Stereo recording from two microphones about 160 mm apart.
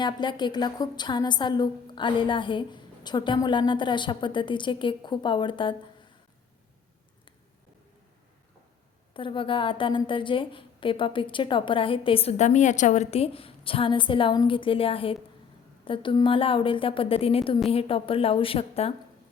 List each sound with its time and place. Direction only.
0.0 s a woman's voice: 30° left (ahead or behind)
9.1 s a woman's voice: 30° left (ahead or behind)